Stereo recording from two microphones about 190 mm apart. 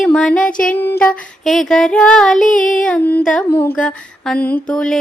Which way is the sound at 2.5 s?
45° left (ahead or behind).